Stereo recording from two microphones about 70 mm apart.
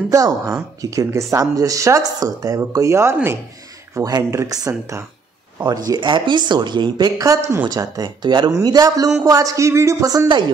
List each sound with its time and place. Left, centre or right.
0.1 s a woman's voice: right
4.5 s a woman's voice: right
6.0 s speech: right
7.6 s speech: right
8.6 s a woman's voice: right